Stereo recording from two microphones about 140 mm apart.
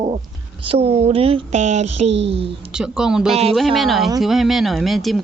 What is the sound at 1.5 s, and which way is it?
Speech, 55° right (ahead or behind).